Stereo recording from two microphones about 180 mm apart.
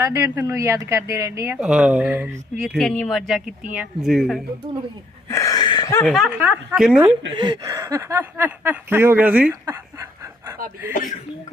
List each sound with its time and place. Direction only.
0.0 s speech: 15° right (ahead or behind)
1.5 s speech: 5° right (ahead or behind)
5.3 s a sound: 20° left (ahead or behind)
6.1 s speech: centre (ahead or behind)
7.3 s speech: 25° right (ahead or behind); by 9.5 s 10° right (ahead or behind)
9.5 s a sound: 15° right (ahead or behind)